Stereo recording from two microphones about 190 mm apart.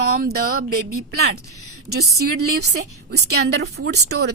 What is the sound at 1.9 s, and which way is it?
A woman's voice, 60° right (ahead or behind).